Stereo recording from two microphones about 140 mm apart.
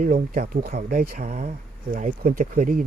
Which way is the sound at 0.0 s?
85° right.